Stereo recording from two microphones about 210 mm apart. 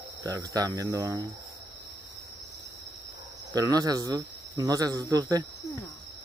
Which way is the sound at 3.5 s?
20° right (ahead or behind).